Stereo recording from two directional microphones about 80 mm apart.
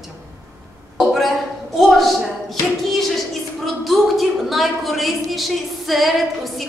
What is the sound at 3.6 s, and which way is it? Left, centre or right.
A woman's voice, centre.